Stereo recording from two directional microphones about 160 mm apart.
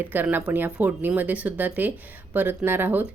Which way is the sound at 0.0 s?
10° right (ahead or behind).